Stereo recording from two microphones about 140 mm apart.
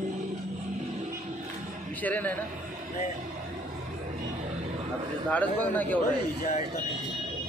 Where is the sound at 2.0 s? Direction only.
10° left (ahead or behind).